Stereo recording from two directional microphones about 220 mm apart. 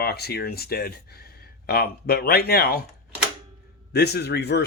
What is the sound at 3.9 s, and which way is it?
Speech, 50° left (ahead or behind).